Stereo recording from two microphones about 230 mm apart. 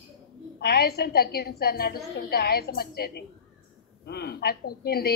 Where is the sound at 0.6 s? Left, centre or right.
Left.